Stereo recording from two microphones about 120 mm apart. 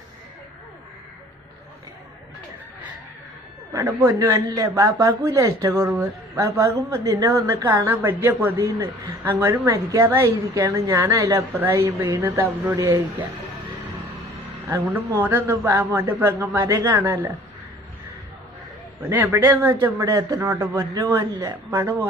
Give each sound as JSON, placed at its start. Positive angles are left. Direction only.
{"t": 3.7, "sound": "speech", "side_deg": -20}
{"t": 8.5, "sound": "a man's voice", "side_deg": -30}
{"t": 15.1, "sound": "speech", "side_deg": -20}
{"t": 19.0, "sound": "speech", "side_deg": -15}